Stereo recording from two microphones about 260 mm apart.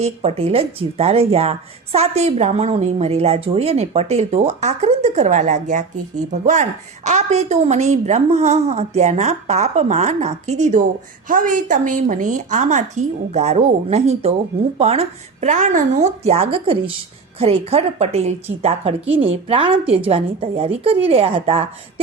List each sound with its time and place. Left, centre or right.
0.0 s speech: right